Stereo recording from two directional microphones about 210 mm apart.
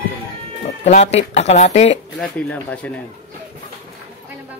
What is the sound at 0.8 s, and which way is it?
Speech, 30° left (ahead or behind).